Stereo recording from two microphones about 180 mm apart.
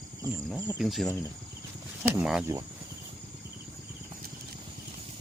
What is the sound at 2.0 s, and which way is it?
Speech, 15° right (ahead or behind).